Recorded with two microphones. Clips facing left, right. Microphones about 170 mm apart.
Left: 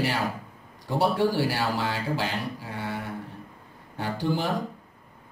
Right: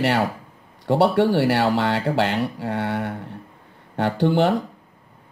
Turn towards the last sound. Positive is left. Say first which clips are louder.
# right 9 dB
turn(degrees=-70)  # may be behind; listen again after turning